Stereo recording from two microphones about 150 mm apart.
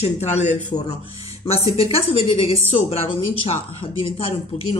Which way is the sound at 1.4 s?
40° left (ahead or behind).